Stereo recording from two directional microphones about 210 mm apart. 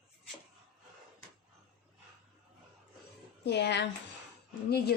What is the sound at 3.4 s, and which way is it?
Speech, 55° left (ahead or behind).